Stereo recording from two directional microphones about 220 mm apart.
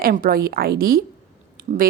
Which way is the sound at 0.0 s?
40° right (ahead or behind).